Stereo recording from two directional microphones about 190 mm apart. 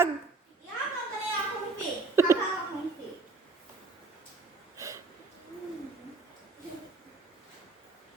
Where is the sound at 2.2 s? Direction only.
15° right (ahead or behind).